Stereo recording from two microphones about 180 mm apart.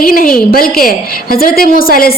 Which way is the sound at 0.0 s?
50° left (ahead or behind).